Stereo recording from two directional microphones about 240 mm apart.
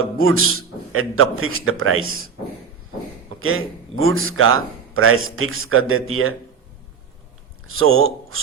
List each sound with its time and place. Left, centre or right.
0.2 s a man's voice: right
3.4 s a man's voice: right
7.7 s a man's voice: right